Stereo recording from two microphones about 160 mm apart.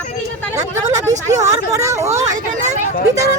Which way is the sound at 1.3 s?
20° right (ahead or behind).